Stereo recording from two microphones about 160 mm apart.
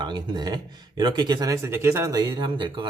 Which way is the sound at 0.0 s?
25° right (ahead or behind).